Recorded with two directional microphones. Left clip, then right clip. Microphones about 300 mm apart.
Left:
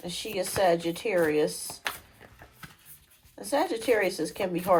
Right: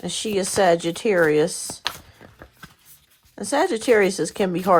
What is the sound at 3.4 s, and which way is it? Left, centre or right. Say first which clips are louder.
Speech: right 6 dB; right.